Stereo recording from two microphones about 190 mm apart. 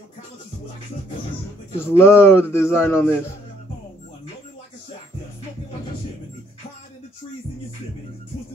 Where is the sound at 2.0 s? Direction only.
10° left (ahead or behind).